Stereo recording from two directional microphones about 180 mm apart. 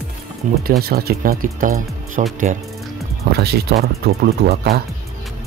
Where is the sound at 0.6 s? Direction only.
55° right (ahead or behind).